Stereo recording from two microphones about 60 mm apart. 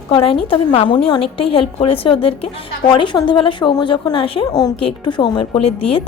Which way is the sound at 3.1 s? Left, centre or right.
Left.